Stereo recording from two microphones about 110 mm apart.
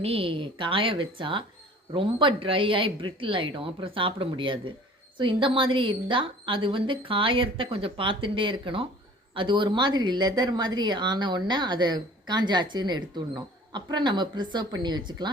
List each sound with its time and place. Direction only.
0.0 s a woman's voice: 60° right (ahead or behind); by 15.3 s 40° right (ahead or behind)